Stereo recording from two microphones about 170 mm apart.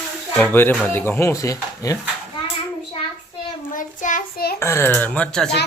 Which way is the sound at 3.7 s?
50° left (ahead or behind).